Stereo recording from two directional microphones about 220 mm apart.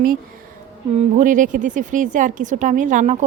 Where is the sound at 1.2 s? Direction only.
35° right (ahead or behind).